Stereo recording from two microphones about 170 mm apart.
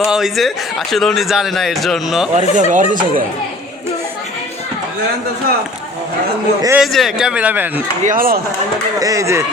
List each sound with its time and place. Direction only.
0.0 s speech: 5° right (ahead or behind)
2.3 s speech: 45° right (ahead or behind)
6.7 s speech: centre (ahead or behind)
8.0 s speech: 55° right (ahead or behind)
9.0 s speech: 20° right (ahead or behind)